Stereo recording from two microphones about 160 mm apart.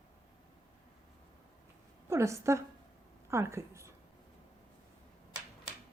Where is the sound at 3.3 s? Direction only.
15° right (ahead or behind).